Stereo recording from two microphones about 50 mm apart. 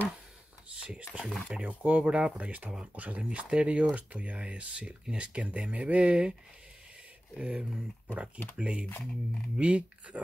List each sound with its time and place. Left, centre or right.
0.7 s speech: right
7.3 s speech: right